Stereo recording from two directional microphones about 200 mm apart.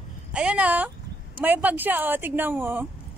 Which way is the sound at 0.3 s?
5° right (ahead or behind).